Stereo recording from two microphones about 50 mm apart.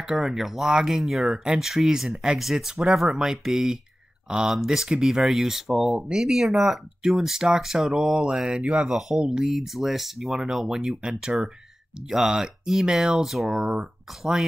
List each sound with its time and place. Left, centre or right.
0.0 s speech: centre
8.8 s speech: centre
9.2 s speech: centre
9.5 s speech: centre
13.6 s speech: right